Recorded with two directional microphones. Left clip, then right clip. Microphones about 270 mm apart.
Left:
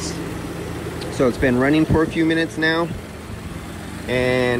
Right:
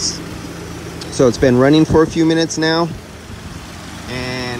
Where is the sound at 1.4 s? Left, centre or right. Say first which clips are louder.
Right 6 dB; centre.